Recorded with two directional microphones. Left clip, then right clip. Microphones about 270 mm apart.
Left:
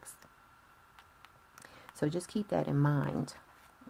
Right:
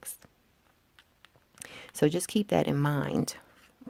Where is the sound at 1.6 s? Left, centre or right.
Right.